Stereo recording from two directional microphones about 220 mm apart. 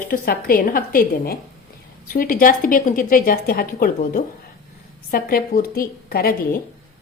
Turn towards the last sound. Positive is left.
turn(degrees=40)  # may be behind; listen again after turning